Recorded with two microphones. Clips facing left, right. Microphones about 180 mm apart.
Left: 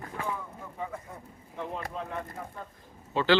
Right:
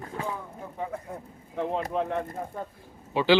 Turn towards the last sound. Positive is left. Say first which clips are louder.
# right 3 dB
turn(degrees=-15)  # may be behind; listen again after turning